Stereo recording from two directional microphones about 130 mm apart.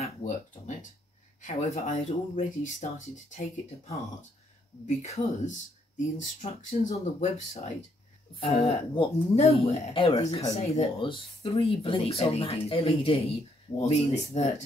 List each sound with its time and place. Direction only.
1.4 s speech: 75° left (ahead or behind)
2.0 s speech: 60° left (ahead or behind)
6.4 s speech: 70° left (ahead or behind)
8.4 s speech: 45° left (ahead or behind)